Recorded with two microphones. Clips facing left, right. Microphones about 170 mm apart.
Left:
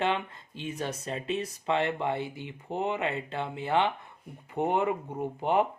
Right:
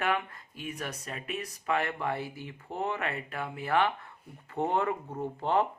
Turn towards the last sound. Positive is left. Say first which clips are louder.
# left 2 dB
turn(degrees=15)  # may be behind; listen again after turning